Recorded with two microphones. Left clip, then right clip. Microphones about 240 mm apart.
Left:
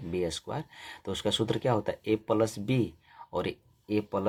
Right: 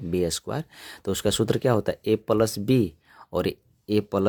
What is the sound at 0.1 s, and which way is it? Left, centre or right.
Speech, right.